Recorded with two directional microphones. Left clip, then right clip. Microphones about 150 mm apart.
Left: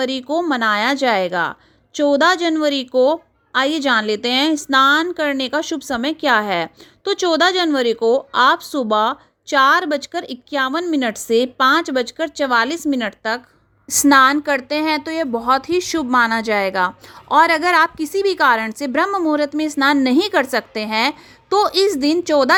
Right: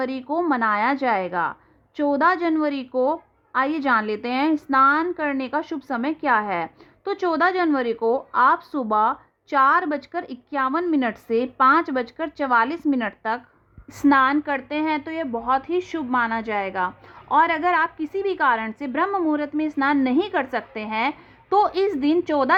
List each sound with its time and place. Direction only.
0.0 s a woman's voice: 20° left (ahead or behind)
13.9 s a woman's voice: 35° left (ahead or behind)